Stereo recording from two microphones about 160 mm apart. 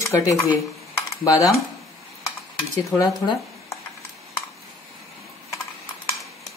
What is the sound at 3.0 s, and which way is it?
Speech, 20° left (ahead or behind).